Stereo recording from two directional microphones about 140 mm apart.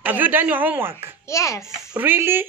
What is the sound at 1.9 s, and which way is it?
Speech, 15° right (ahead or behind).